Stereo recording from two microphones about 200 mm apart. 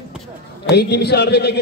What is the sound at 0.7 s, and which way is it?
Speech, 55° left (ahead or behind).